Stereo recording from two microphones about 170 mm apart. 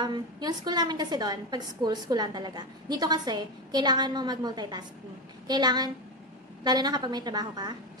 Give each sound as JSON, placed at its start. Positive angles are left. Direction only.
{"t": 0.0, "sound": "a woman's voice", "side_deg": -25}